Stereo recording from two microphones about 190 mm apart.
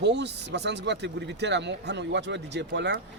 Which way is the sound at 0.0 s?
65° right (ahead or behind).